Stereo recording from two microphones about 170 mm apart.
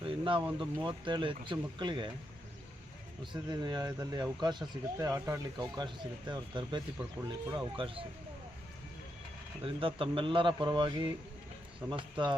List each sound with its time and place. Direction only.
0.0 s vehicle: 30° right (ahead or behind)
0.6 s speech: 25° right (ahead or behind)
3.5 s speech: 25° right (ahead or behind)
9.6 s speech: 30° right (ahead or behind)